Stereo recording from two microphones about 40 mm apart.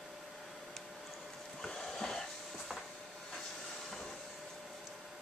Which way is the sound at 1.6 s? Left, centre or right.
Centre.